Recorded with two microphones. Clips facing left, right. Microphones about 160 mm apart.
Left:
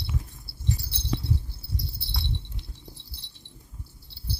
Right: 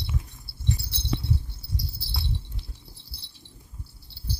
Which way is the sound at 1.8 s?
20° left (ahead or behind).